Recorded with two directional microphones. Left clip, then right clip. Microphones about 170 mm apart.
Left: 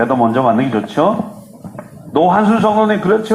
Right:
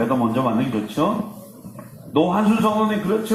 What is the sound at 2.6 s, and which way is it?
Speech, 25° left (ahead or behind).